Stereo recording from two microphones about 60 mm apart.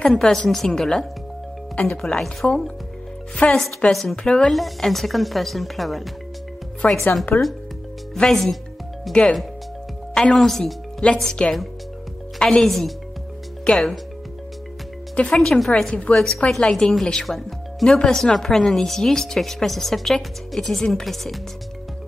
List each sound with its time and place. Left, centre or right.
0.0 s a woman's voice: centre
2.0 s a woman's voice: centre
6.8 s speech: left
7.3 s speech: left
8.3 s speech: centre
9.1 s music: centre
10.3 s speech: centre
11.0 s speech: centre
12.4 s speech: centre
15.1 s a woman's voice: centre